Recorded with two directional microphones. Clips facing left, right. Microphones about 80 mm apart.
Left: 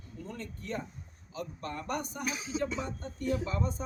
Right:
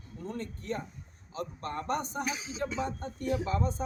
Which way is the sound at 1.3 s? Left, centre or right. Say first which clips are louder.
Right 2 dB; right.